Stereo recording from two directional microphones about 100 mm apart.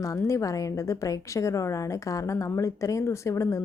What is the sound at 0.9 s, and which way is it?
A woman's voice, 30° left (ahead or behind).